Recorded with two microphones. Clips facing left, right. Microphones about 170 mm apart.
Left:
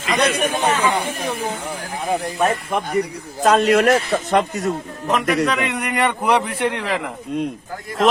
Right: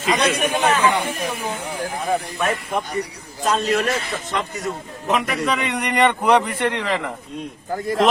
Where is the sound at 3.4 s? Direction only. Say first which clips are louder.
Left 6 dB; 70° left (ahead or behind).